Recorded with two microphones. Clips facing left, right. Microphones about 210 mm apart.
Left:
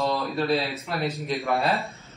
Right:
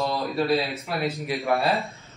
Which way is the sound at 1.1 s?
15° right (ahead or behind).